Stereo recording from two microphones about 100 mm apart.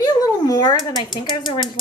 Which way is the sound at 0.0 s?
40° left (ahead or behind).